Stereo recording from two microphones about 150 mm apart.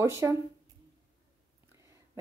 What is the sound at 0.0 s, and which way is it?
Speech, 20° right (ahead or behind).